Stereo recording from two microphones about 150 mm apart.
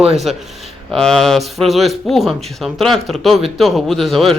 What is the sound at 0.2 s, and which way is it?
A man's voice, centre (ahead or behind).